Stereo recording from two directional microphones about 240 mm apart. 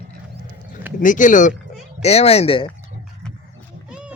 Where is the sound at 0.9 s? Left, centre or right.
Left.